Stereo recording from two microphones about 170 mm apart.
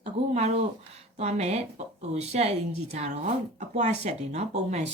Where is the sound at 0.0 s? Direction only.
40° right (ahead or behind).